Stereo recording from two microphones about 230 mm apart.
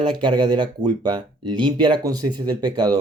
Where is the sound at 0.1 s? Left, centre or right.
Centre.